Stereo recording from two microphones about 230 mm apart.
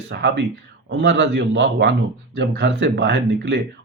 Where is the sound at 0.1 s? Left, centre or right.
Right.